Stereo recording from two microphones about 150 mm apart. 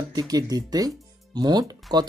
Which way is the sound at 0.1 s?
25° right (ahead or behind).